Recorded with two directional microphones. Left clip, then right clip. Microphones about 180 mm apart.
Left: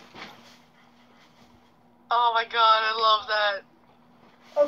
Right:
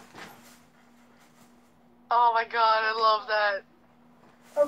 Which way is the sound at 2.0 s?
20° right (ahead or behind).